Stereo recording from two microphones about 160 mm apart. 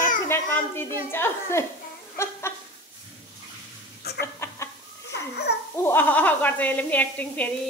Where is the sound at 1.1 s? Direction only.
15° left (ahead or behind).